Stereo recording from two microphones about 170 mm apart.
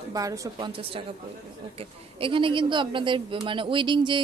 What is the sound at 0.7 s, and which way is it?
A woman's voice, 30° right (ahead or behind).